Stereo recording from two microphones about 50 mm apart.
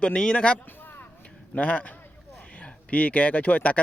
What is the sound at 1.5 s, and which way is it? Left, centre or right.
Speech, left.